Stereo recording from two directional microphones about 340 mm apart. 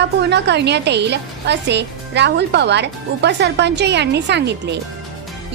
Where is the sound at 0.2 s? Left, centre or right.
Right.